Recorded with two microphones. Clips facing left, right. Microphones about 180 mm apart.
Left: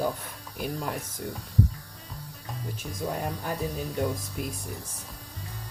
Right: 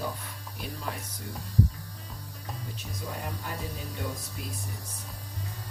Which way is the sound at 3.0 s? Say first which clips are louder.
Left 8 dB; 55° left (ahead or behind).